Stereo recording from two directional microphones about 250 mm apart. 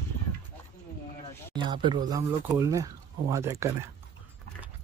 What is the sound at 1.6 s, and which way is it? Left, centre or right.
Speech, centre.